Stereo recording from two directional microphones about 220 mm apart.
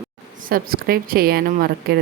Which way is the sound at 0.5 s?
45° right (ahead or behind).